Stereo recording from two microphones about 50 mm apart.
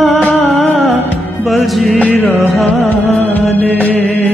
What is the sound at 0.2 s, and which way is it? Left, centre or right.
Music, left.